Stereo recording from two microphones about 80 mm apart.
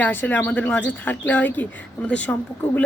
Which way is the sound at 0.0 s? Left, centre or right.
Left.